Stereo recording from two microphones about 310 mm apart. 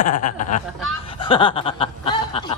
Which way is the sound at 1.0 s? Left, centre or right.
Centre.